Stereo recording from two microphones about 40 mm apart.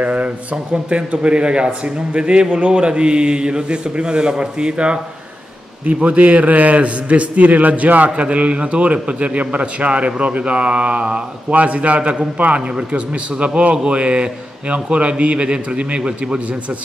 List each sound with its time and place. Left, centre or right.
0.0 s a man's voice: right